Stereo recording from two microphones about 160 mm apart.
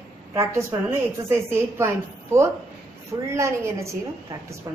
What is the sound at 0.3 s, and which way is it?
Speech, 20° right (ahead or behind).